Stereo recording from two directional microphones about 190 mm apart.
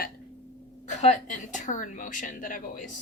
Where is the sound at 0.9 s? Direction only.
40° left (ahead or behind).